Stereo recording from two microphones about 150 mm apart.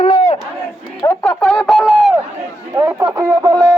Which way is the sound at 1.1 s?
10° left (ahead or behind).